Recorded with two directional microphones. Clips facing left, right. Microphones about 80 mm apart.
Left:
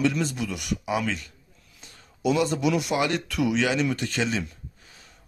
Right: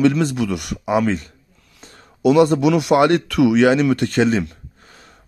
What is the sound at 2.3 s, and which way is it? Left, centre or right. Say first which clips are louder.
Speech: right 9 dB; right.